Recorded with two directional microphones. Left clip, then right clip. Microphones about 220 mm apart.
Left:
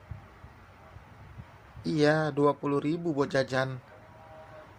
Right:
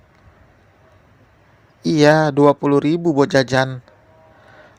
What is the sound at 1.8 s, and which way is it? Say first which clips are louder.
Speech: right 13 dB; 35° right (ahead or behind).